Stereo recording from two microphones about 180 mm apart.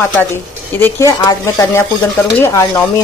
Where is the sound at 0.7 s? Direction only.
10° left (ahead or behind).